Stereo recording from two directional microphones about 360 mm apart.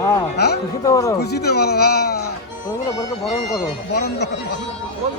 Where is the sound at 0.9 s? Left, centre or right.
Centre.